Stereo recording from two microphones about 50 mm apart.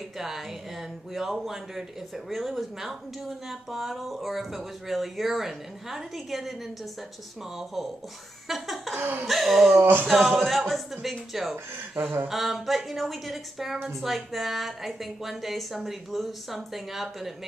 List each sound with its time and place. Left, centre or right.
0.2 s speech: centre
8.9 s laughter: right
9.3 s speech: centre
9.8 s a sound: right
10.0 s speech: centre
11.9 s a sound: right
12.3 s speech: centre